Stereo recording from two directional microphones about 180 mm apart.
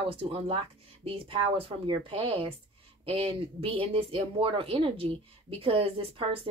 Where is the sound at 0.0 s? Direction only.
30° right (ahead or behind).